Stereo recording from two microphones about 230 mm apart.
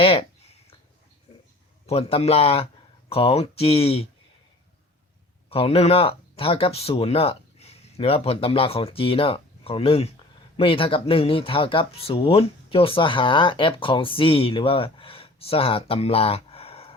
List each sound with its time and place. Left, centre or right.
0.0 s a sound: left
1.9 s speech: left
5.5 s speech: left